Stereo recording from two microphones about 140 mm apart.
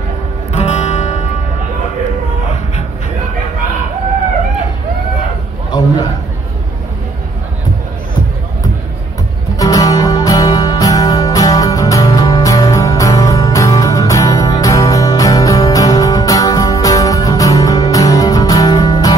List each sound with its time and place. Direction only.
0.5 s music: 50° left (ahead or behind)
5.7 s a sound: 30° left (ahead or behind)
9.6 s music: 25° left (ahead or behind)